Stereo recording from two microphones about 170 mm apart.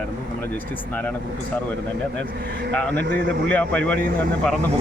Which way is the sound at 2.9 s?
80° right.